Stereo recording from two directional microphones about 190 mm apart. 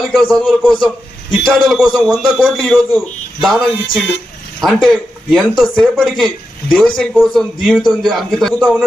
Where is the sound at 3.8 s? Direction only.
30° left (ahead or behind).